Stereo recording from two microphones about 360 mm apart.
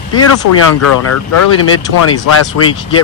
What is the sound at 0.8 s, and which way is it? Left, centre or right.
Speech, left.